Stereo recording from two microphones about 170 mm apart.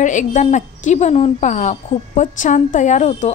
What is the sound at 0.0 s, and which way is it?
A woman's voice, 45° left (ahead or behind).